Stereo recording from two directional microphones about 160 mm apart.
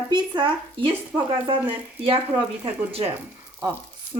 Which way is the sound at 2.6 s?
35° right (ahead or behind).